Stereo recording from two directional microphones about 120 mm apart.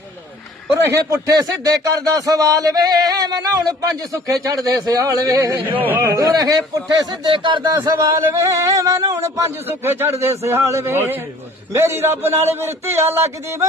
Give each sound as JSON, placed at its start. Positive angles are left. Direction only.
{"t": 0.9, "sound": "speech", "side_deg": -30}
{"t": 5.5, "sound": "speech", "side_deg": -15}
{"t": 7.8, "sound": "speech", "side_deg": -25}